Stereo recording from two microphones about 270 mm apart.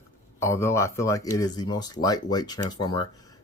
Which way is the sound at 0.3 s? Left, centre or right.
Centre.